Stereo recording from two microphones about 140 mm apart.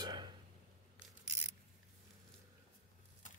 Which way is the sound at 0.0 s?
30° right (ahead or behind).